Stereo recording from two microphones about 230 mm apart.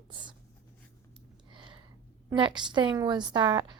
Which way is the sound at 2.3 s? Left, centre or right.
Right.